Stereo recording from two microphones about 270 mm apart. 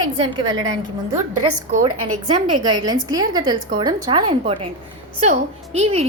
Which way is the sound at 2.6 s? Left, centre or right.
Centre.